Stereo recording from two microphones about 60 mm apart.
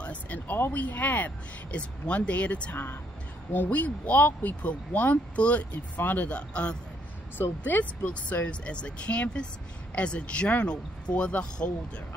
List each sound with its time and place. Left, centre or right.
0.0 s speech: left